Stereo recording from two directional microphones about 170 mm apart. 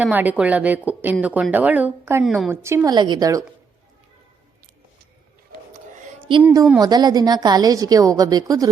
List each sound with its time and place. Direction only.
0.0 s a woman's voice: 10° right (ahead or behind)
2.2 s a woman's voice: centre (ahead or behind)
2.5 s a woman's voice: 15° right (ahead or behind)
6.3 s a woman's voice: 30° right (ahead or behind)